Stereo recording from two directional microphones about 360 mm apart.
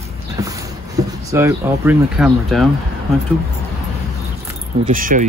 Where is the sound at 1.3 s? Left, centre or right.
Centre.